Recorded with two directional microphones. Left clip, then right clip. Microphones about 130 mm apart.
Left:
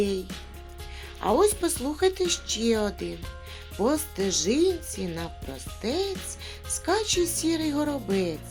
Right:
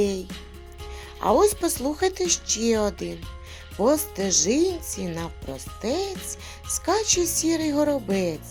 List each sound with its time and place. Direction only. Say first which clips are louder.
0.0 s speech: right 3 dB; 40° right (ahead or behind)